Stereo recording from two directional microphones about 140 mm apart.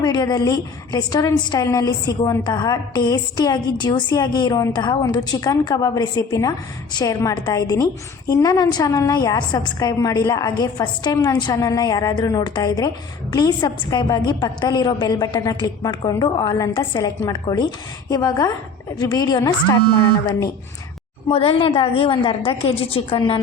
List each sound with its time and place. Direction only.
0.0 s a woman's voice: 30° left (ahead or behind)
21.2 s a woman's voice: 40° left (ahead or behind)